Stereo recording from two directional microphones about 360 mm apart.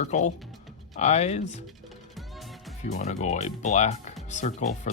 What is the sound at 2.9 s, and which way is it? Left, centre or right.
Speech, centre.